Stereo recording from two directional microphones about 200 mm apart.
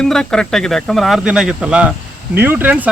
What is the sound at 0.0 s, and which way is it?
Speech, 5° left (ahead or behind).